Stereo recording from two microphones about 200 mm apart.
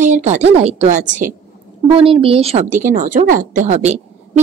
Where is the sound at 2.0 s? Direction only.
25° right (ahead or behind).